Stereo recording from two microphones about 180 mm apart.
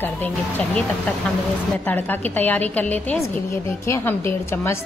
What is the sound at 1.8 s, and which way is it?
A woman's voice, 10° left (ahead or behind).